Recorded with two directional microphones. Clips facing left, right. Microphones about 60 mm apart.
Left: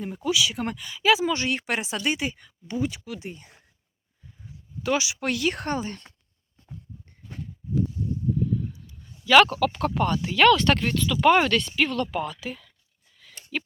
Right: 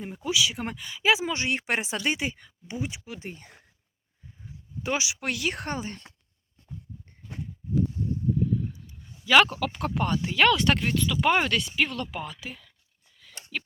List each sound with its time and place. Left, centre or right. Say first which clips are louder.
0.3 s a woman's voice: left 2 dB; right
3.1 s speech: left 3 dB; right
4.8 s speech: left 4 dB; centre
9.2 s speech: left 3 dB; centre
13.1 s a sound: left 3 dB; centre